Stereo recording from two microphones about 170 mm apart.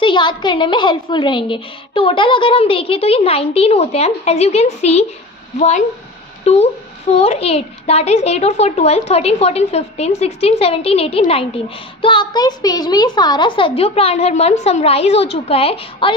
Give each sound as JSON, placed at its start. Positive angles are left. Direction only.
{"t": 0.0, "sound": "a woman's voice", "side_deg": 30}